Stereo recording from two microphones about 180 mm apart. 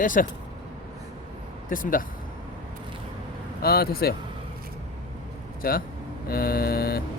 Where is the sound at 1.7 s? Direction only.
50° left (ahead or behind).